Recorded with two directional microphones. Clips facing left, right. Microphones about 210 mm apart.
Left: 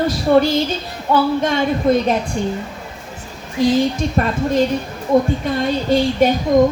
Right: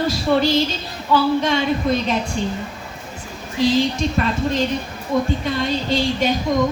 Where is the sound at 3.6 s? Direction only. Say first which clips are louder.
Left 2 dB; 50° left (ahead or behind).